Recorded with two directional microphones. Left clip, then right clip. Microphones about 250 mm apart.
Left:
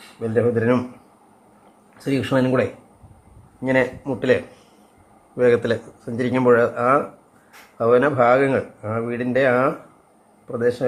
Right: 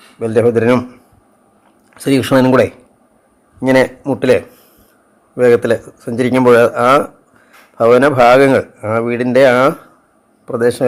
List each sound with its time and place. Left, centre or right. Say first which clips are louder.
0.2 s a man's voice: right 8 dB; right
2.0 s a man's voice: right 9 dB; right